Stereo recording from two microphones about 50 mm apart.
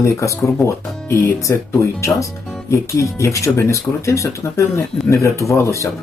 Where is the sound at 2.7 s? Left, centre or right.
Left.